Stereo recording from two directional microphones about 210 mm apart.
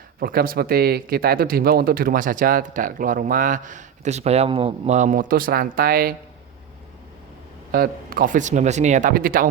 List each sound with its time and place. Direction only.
0.2 s speech: 45° right (ahead or behind)
7.7 s speech: 45° right (ahead or behind)